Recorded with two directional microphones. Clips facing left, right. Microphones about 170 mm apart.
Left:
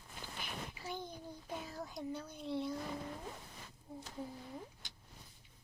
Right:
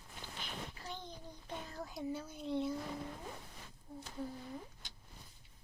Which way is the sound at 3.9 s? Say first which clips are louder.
Even; 10° left (ahead or behind).